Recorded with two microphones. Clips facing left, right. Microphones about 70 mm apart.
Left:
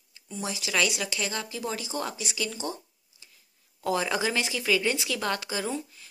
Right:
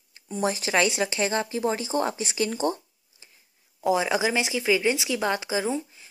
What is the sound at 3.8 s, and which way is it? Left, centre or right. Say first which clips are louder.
Speech: right 4 dB; centre.